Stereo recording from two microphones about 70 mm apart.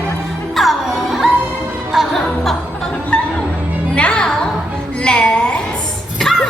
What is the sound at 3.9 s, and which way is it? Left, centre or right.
Music, centre.